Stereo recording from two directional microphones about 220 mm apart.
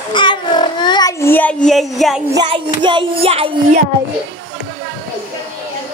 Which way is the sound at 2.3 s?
20° right (ahead or behind).